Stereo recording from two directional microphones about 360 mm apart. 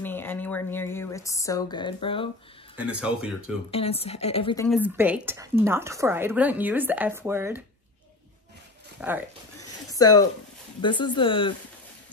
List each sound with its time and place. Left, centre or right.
0.0 s speech: centre
2.8 s speech: centre
3.7 s a woman's voice: centre
4.6 s speech: centre
9.0 s speech: centre
9.6 s a woman's voice: centre